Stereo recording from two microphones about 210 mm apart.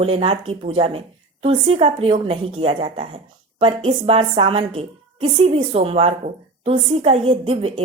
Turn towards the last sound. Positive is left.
turn(degrees=-25)  # may be behind; listen again after turning